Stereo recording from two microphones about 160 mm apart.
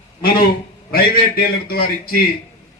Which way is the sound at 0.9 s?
70° left (ahead or behind).